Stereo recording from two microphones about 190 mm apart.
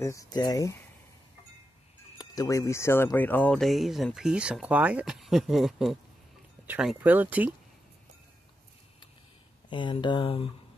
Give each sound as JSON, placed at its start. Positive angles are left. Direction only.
{"t": 0.0, "sound": "speech", "side_deg": 15}
{"t": 2.1, "sound": "speech", "side_deg": 20}
{"t": 9.7, "sound": "speech", "side_deg": 25}